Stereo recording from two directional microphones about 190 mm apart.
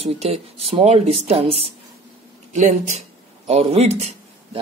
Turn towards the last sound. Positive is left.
turn(degrees=-35)  # may be behind; listen again after turning